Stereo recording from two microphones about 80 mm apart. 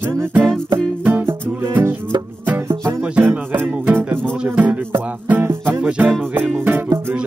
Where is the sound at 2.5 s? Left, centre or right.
Right.